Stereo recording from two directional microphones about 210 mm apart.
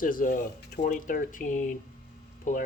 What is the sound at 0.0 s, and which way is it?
Speech, 40° left (ahead or behind).